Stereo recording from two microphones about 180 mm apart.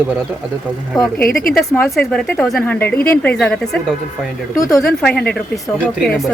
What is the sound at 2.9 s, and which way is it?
Speech, 55° left (ahead or behind).